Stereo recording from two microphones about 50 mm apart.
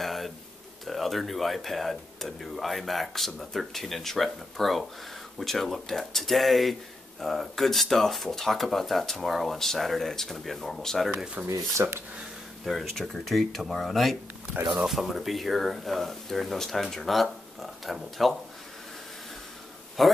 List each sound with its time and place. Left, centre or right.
0.0 s a sound: centre
0.8 s speech: centre
11.4 s speech: right
12.6 s speech: centre
20.0 s speech: centre